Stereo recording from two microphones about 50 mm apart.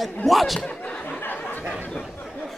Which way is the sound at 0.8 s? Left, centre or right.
Left.